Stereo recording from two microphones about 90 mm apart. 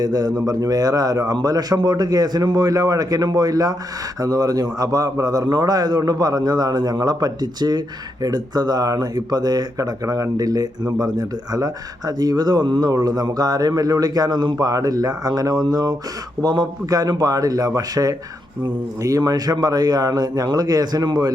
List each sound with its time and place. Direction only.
0.0 s speech: 50° right (ahead or behind)